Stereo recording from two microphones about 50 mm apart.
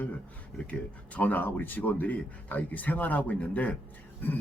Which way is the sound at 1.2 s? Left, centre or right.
Left.